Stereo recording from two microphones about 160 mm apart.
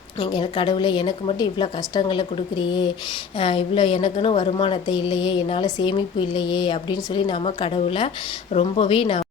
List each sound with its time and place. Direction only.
0.2 s a woman's voice: 30° left (ahead or behind)